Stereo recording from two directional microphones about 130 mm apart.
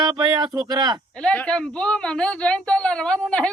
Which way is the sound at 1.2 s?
10° left (ahead or behind).